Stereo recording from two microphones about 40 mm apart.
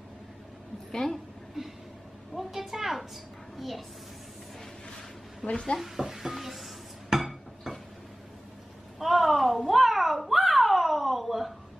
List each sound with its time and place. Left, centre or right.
0.9 s speech: centre
2.3 s a woman's voice: centre
5.4 s speech: centre
5.8 s dishes: centre
9.0 s a sound: centre